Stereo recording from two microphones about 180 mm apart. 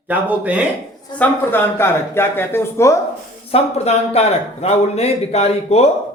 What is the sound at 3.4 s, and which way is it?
A man's voice, 35° left (ahead or behind).